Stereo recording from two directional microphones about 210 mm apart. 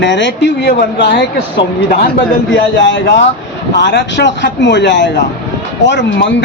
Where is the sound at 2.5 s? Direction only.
60° left (ahead or behind).